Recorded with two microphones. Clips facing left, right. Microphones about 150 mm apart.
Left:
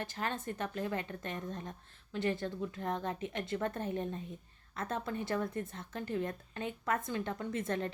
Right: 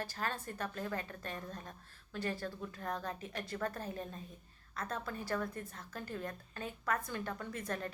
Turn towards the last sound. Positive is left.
turn(degrees=25)  # may be behind; listen again after turning